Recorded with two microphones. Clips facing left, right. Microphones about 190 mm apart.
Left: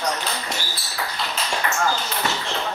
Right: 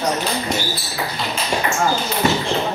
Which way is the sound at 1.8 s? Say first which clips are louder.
Right 6 dB; 25° right (ahead or behind).